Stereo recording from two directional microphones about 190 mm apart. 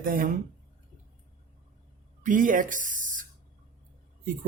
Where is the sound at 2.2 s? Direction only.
45° right (ahead or behind).